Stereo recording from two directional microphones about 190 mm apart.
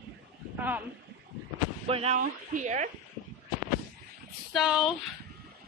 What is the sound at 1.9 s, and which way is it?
Speech, 35° right (ahead or behind).